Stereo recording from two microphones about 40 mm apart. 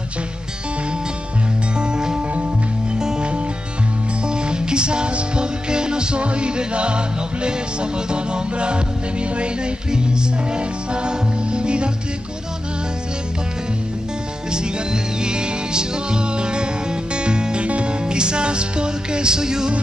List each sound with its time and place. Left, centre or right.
1.8 s music: centre
14.5 s music: right